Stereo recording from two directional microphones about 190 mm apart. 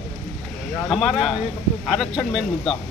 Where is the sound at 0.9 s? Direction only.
Centre (ahead or behind).